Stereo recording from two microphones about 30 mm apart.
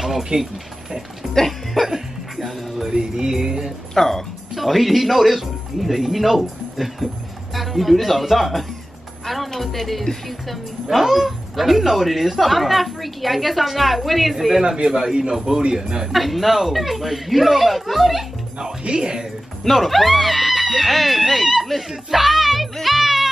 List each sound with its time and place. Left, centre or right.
0.0 s music: centre
1.2 s speech: centre
2.9 s music: right
3.9 s speech: centre
4.6 s speech: centre
14.9 s music: right
15.3 s speech: centre
15.7 s music: right
16.1 s speech: centre
18.6 s music: right
19.7 s speech: centre
22.8 s music: centre